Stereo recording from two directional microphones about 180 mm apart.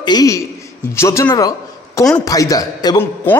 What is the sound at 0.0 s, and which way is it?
A man's voice, 20° left (ahead or behind).